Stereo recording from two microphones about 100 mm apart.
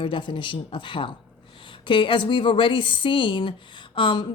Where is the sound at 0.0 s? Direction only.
55° left (ahead or behind).